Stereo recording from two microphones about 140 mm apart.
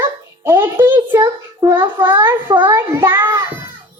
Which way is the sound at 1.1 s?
20° right (ahead or behind).